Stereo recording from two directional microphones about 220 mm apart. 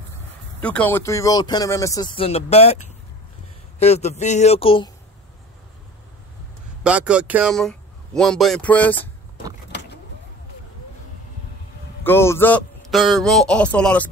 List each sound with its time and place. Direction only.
0.6 s speech: 5° left (ahead or behind); by 4.9 s 25° left (ahead or behind)
6.8 s speech: 5° right (ahead or behind)
12.0 s a man's voice: 10° left (ahead or behind)